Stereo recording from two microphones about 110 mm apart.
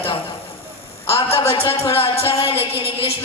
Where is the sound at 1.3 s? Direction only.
60° left (ahead or behind).